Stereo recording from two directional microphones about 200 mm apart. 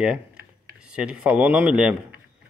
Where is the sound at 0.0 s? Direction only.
5° right (ahead or behind).